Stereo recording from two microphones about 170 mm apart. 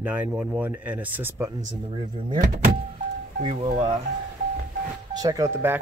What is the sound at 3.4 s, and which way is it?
Speech, 30° right (ahead or behind).